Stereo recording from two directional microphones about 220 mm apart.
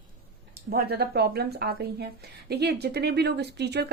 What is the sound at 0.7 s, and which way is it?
Speech, 45° right (ahead or behind).